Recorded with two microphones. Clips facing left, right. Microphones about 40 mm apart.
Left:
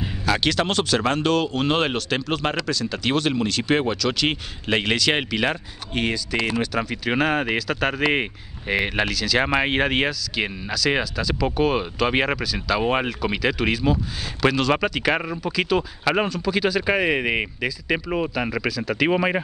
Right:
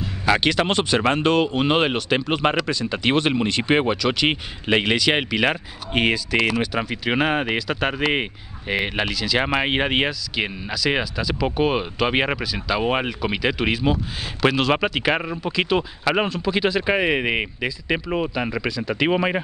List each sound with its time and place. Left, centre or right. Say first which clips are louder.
0.2 s speech: right 3 dB; centre